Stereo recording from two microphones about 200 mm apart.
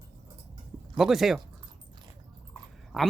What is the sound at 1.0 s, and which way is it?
Speech, centre (ahead or behind).